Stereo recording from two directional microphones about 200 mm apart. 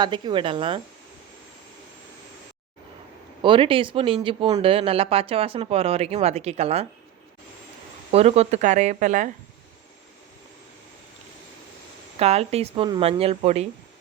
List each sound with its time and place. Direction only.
0.0 s speech: 25° right (ahead or behind)
3.4 s speech: 25° right (ahead or behind)
8.1 s a woman's voice: 30° right (ahead or behind)
12.2 s a woman's voice: 30° right (ahead or behind)